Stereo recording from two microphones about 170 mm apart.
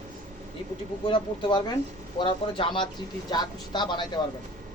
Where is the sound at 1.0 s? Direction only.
30° left (ahead or behind).